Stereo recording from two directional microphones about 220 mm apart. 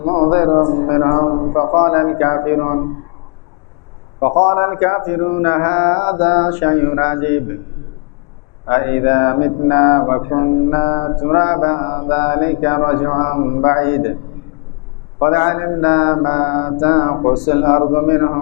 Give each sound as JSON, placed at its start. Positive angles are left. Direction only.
{"t": 0.0, "sound": "speech", "side_deg": 30}
{"t": 4.2, "sound": "speech", "side_deg": 25}
{"t": 8.6, "sound": "speech", "side_deg": 20}
{"t": 15.2, "sound": "speech", "side_deg": 20}